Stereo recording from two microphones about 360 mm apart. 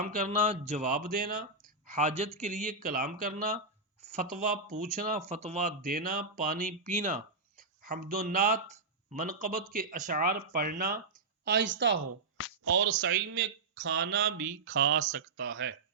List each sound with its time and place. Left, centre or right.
0.0 s speech: right